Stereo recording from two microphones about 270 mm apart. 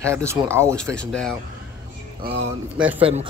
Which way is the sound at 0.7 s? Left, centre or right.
Centre.